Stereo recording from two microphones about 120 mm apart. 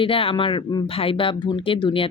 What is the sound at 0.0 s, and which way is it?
A woman's voice, 50° left (ahead or behind).